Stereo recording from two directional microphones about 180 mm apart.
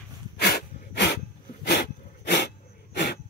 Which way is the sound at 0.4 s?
65° left (ahead or behind).